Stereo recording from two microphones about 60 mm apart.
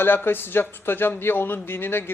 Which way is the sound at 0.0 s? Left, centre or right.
Left.